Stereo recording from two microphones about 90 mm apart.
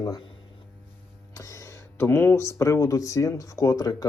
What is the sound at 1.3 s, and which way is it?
Speech, 35° left (ahead or behind).